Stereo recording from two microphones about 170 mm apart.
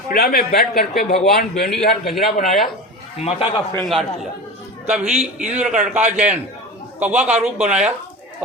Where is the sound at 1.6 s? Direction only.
Centre (ahead or behind).